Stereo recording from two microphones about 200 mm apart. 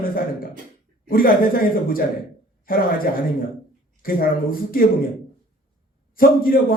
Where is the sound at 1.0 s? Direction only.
45° left (ahead or behind).